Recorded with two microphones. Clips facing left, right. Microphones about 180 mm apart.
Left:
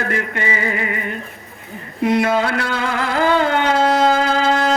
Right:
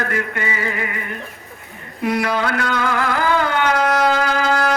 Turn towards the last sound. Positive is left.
turn(degrees=25)  # may be behind; listen again after turning